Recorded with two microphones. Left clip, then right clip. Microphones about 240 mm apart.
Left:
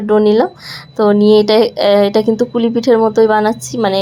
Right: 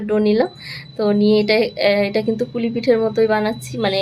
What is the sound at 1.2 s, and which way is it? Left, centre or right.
A woman's voice, left.